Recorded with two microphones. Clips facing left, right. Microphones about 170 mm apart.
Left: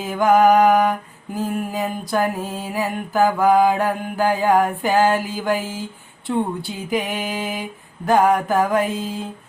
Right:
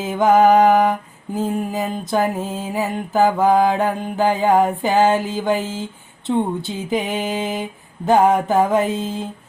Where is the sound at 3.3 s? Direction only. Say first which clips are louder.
Even; 20° right (ahead or behind).